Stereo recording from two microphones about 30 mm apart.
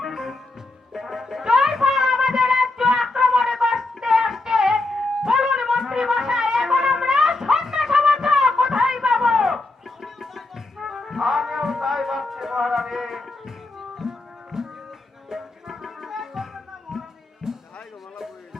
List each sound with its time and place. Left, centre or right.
0.1 s music: centre
4.8 s music: centre
5.2 s music: centre
9.6 s tabla: centre
11.2 s music: centre
14.1 s music: centre
16.9 s music: right